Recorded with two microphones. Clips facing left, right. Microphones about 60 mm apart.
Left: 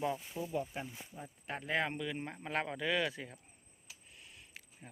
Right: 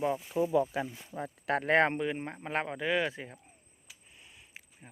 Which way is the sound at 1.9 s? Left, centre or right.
Right.